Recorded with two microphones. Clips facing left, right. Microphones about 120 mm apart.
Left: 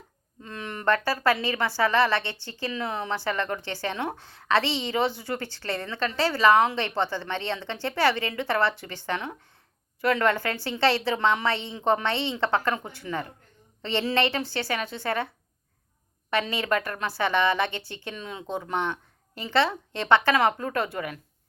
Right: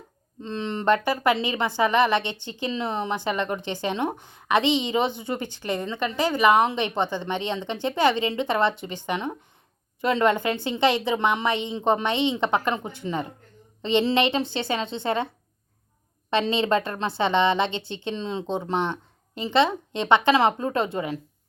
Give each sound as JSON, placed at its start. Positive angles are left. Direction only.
{"t": 0.4, "sound": "speech", "side_deg": -25}
{"t": 16.3, "sound": "speech", "side_deg": -25}